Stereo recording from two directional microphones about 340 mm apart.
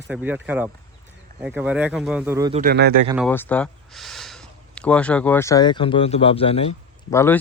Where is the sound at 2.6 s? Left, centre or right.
Right.